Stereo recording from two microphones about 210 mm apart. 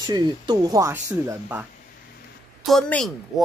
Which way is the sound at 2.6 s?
Centre (ahead or behind).